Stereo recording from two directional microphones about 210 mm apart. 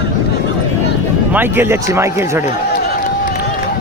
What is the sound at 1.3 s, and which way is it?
Speech, 10° right (ahead or behind).